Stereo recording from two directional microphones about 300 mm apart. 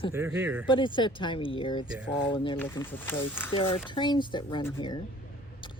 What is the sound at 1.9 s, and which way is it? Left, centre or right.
Speech, centre.